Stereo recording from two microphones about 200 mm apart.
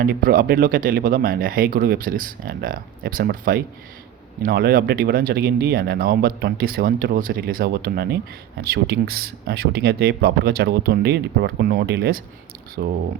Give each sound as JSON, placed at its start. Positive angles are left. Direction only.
{"t": 0.0, "sound": "speech", "side_deg": -45}